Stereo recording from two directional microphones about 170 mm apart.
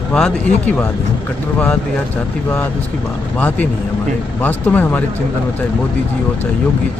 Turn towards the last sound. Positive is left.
turn(degrees=10)  # may be behind; listen again after turning